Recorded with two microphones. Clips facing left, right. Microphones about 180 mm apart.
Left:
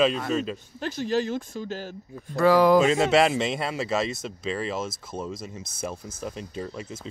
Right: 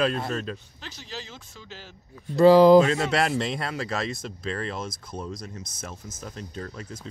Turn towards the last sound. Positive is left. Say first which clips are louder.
# left 3 dB
turn(degrees=10)  # may be behind; listen again after turning